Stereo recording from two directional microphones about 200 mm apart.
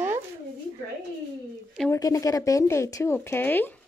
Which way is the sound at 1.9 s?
15° left (ahead or behind).